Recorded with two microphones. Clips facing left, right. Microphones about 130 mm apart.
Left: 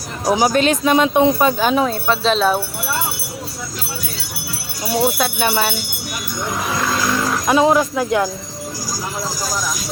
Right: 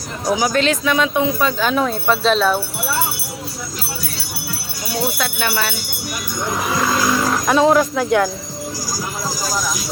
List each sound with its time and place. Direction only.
0.3 s speech: 30° left (ahead or behind)
0.5 s speech: 20° left (ahead or behind)
1.5 s speech: 15° left (ahead or behind)
1.9 s speech: centre (ahead or behind)
5.1 s speech: 20° left (ahead or behind)
6.4 s roaring cats: centre (ahead or behind)
7.5 s speech: 5° left (ahead or behind)